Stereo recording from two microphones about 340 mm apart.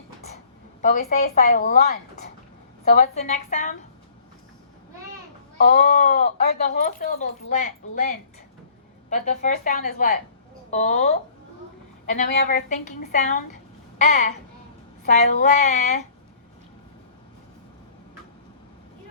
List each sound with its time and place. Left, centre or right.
0.8 s speech: left
5.6 s speech: left
12.1 s speech: left